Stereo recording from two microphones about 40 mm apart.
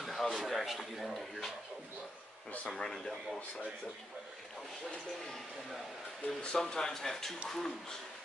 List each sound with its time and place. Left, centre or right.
0.0 s a sound: centre
2.7 s speech: centre
6.2 s speech: left
6.6 s speech: centre